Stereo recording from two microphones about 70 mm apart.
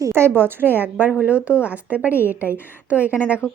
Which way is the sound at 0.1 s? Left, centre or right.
Right.